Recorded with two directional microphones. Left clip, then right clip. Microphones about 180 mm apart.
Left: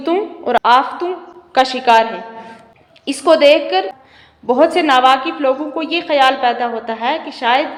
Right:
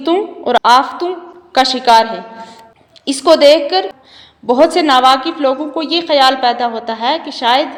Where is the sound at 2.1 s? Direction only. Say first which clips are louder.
Right 1 dB; 30° right (ahead or behind).